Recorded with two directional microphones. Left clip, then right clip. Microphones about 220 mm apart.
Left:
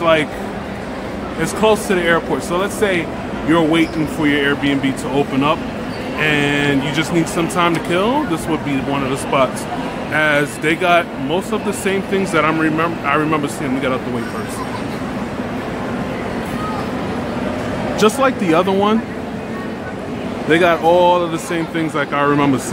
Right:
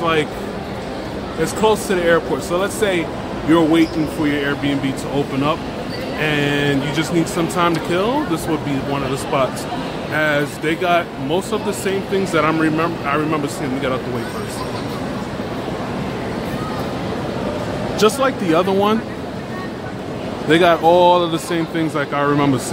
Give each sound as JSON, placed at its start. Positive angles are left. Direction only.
{"t": 0.0, "sound": "speech", "side_deg": 10}
{"t": 1.4, "sound": "speech", "side_deg": 10}
{"t": 11.2, "sound": "speech", "side_deg": 5}
{"t": 11.8, "sound": "speech", "side_deg": 15}
{"t": 12.4, "sound": "speech", "side_deg": 0}
{"t": 13.0, "sound": "speech", "side_deg": 20}
{"t": 17.9, "sound": "speech", "side_deg": 15}
{"t": 20.4, "sound": "speech", "side_deg": -5}